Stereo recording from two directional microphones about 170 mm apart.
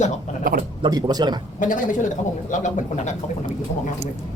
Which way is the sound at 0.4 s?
55° right (ahead or behind).